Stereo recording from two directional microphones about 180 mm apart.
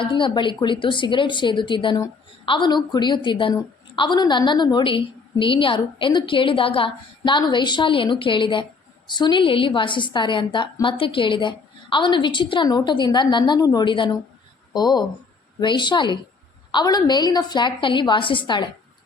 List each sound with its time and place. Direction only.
0.0 s a woman's voice: 25° left (ahead or behind)